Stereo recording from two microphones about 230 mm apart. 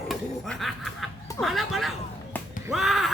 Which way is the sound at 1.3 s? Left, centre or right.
Centre.